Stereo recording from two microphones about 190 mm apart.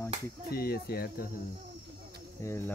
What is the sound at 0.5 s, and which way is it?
Speech, 55° left (ahead or behind).